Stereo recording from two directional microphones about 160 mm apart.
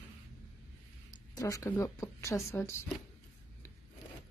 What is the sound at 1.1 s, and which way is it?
A woman's voice, 20° left (ahead or behind).